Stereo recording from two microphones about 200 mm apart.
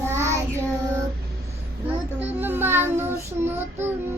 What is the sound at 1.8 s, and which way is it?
Child singing, 10° right (ahead or behind).